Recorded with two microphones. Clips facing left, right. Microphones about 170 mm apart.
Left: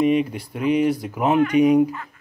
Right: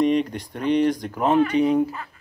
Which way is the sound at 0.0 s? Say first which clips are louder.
Left 1 dB; 5° left (ahead or behind).